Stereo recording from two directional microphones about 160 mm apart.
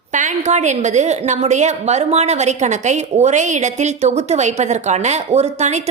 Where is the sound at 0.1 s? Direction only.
50° right (ahead or behind).